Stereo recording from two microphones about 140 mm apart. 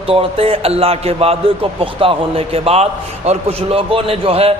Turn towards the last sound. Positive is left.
turn(degrees=-45)  # may be behind; listen again after turning